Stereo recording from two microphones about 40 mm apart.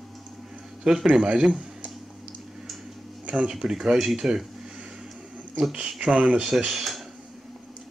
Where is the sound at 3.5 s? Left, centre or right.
Centre.